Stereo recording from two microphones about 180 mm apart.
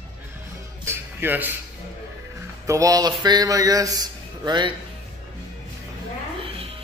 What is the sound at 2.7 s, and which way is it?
A man's voice, 20° right (ahead or behind).